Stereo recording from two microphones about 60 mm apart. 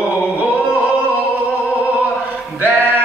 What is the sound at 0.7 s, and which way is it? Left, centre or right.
Music, right.